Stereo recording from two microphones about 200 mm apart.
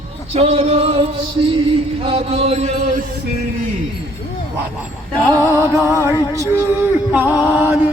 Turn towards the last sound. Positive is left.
turn(degrees=-10)  # may be behind; listen again after turning